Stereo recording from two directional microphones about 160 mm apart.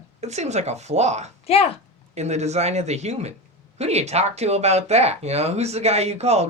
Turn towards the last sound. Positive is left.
turn(degrees=-40)  # may be behind; listen again after turning